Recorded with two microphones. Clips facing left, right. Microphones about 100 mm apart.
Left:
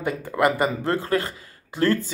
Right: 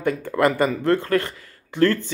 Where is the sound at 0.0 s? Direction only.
10° left (ahead or behind).